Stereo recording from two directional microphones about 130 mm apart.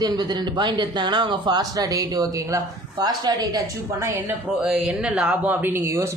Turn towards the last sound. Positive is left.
turn(degrees=-20)  # may be behind; listen again after turning